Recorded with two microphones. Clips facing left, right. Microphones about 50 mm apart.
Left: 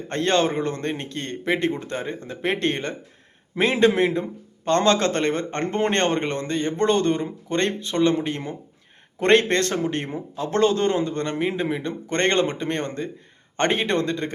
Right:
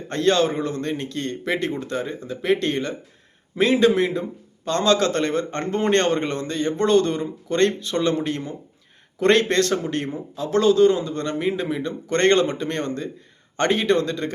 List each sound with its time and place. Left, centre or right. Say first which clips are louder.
0.1 s a man's voice: right 2 dB; left
9.1 s a man's voice: even; left
11.3 s speech: right 2 dB; left